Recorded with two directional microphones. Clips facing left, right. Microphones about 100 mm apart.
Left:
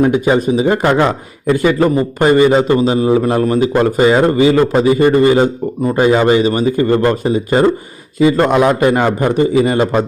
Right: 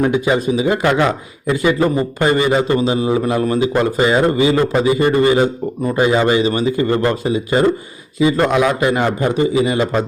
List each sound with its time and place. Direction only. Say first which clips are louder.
0.3 s a man's voice: left 3 dB; 40° left (ahead or behind)
8.4 s a man's voice: left 4 dB; 50° left (ahead or behind)